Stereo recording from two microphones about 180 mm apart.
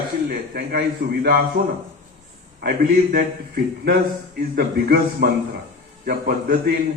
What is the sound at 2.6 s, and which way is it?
A man's voice, 60° right (ahead or behind).